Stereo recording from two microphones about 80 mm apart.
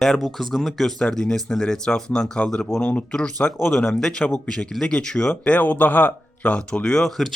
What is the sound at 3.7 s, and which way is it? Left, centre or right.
Speech, centre.